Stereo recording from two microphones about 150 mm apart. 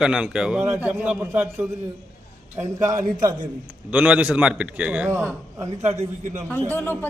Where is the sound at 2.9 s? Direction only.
60° right (ahead or behind).